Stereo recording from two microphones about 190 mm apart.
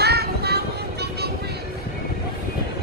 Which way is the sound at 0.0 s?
55° right (ahead or behind).